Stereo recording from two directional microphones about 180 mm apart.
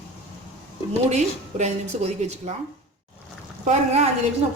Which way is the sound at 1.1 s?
40° right (ahead or behind).